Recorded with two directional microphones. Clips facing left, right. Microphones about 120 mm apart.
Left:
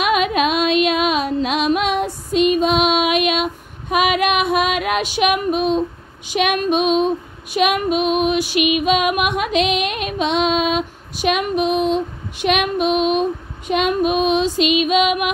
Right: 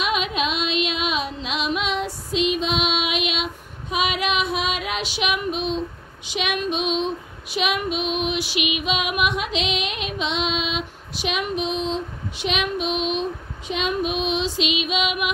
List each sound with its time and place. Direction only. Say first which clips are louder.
0.0 s music: left 7 dB; 55° left (ahead or behind)
8.8 s female singing: left 6 dB; 50° left (ahead or behind)